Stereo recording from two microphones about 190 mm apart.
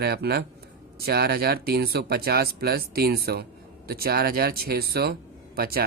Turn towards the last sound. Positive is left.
turn(degrees=-50)  # may be behind; listen again after turning